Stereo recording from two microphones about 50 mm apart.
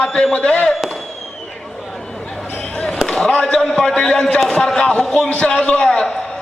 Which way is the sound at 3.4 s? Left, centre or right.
Centre.